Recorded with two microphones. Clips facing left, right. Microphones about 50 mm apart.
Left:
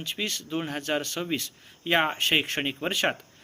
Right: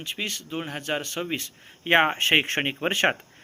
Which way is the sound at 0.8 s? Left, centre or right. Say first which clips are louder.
Even; right.